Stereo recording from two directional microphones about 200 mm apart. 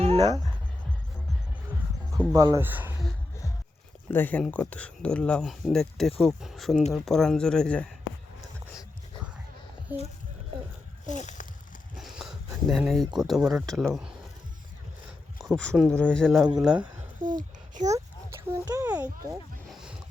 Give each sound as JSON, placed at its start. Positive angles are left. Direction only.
{"t": 0.0, "sound": "music", "side_deg": -30}
{"t": 2.3, "sound": "speech", "side_deg": -20}
{"t": 4.1, "sound": "speech", "side_deg": 10}
{"t": 9.9, "sound": "speech", "side_deg": -10}
{"t": 11.0, "sound": "speech", "side_deg": 35}
{"t": 11.9, "sound": "a sound", "side_deg": 0}
{"t": 13.1, "sound": "speech", "side_deg": 0}
{"t": 15.4, "sound": "speech", "side_deg": 5}
{"t": 17.2, "sound": "a sound", "side_deg": -40}
{"t": 17.9, "sound": "a sound", "side_deg": -15}